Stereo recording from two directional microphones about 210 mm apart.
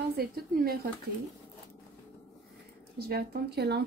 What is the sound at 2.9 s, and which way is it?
Speech, 50° right (ahead or behind).